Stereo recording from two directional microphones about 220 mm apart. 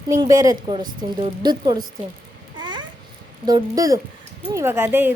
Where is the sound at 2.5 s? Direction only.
20° right (ahead or behind).